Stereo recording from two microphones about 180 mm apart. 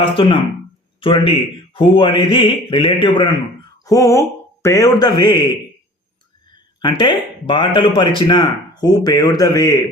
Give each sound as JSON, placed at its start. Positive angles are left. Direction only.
{"t": 0.0, "sound": "speech", "side_deg": 30}
{"t": 6.8, "sound": "speech", "side_deg": 25}